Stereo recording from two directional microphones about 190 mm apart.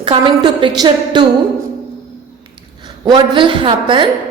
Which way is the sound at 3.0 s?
25° right (ahead or behind).